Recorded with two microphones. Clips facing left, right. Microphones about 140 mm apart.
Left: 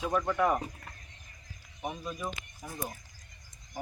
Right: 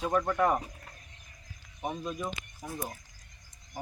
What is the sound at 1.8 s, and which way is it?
Speech, centre (ahead or behind).